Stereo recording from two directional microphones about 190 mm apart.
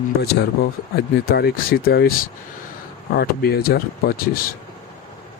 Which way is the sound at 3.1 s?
55° left (ahead or behind).